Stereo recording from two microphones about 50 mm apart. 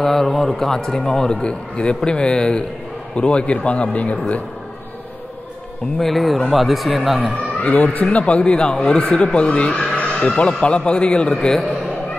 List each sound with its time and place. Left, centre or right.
0.0 s a man's voice: centre; by 4.4 s left
5.9 s speech: centre
7.5 s speech: left
11.3 s a man's voice: centre